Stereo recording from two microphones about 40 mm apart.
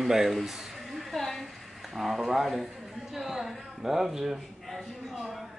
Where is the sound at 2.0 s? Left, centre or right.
Centre.